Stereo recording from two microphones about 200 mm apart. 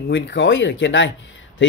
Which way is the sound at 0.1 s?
65° left (ahead or behind).